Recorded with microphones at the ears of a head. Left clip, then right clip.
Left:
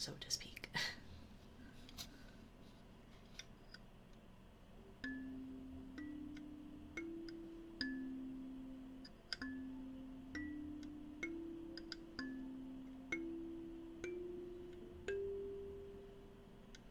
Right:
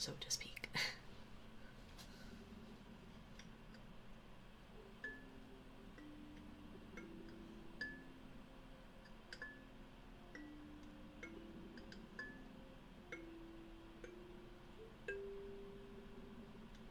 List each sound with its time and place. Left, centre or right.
0.0 s whispering: centre
5.1 s music: left
15.1 s chime: left